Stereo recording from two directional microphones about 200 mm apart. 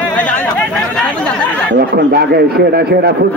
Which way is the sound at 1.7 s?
55° right (ahead or behind).